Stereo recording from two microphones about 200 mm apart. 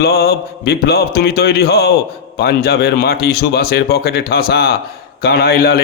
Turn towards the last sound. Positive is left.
turn(degrees=50)  # may be behind; listen again after turning